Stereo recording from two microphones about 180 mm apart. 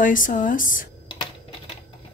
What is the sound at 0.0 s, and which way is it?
Speech, 50° left (ahead or behind).